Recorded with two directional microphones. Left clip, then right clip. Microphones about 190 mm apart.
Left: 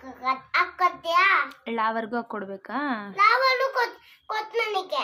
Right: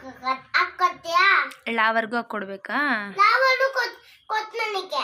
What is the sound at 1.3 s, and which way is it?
A child's voice, 10° left (ahead or behind).